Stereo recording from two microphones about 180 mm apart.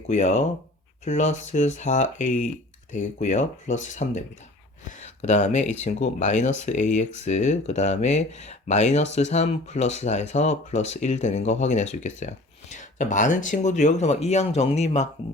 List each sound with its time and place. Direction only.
0.1 s speech: 40° left (ahead or behind)